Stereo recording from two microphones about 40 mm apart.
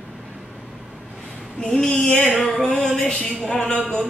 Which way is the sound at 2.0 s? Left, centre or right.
Left.